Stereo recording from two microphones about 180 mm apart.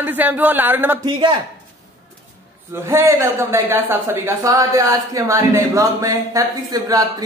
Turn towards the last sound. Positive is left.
turn(degrees=-20)  # may be behind; listen again after turning